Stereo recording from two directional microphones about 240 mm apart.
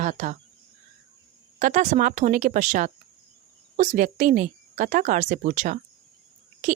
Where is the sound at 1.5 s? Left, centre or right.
Right.